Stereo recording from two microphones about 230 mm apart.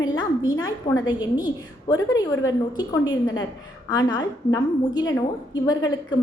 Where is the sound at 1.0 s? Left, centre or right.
Centre.